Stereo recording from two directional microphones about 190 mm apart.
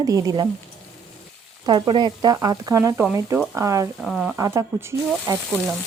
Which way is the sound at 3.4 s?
10° right (ahead or behind).